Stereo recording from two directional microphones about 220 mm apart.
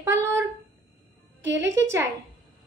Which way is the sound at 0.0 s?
10° right (ahead or behind).